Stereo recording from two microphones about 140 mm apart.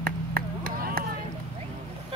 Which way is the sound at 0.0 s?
90° right.